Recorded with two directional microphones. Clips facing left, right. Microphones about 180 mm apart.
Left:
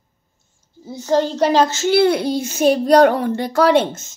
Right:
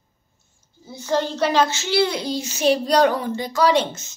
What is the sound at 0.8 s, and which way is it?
A child's voice, 40° left (ahead or behind).